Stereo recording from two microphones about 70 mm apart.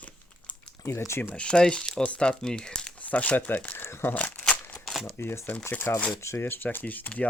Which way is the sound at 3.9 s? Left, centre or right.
Left.